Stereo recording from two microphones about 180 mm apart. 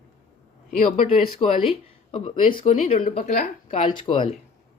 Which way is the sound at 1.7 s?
30° left (ahead or behind).